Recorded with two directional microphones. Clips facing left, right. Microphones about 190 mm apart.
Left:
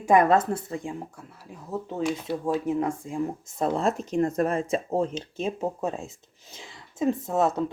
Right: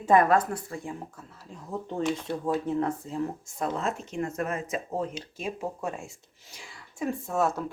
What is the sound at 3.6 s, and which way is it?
Speech, 35° left (ahead or behind).